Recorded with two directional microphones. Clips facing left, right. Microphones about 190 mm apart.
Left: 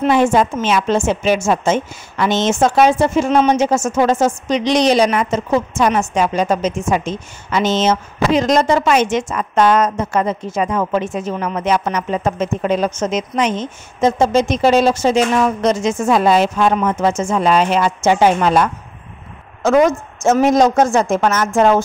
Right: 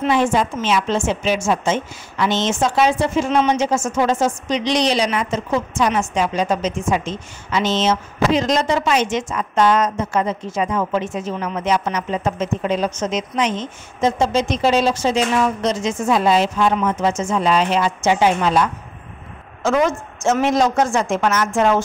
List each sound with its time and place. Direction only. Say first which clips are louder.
0.0 s a woman's voice: left 4 dB; 45° left (ahead or behind)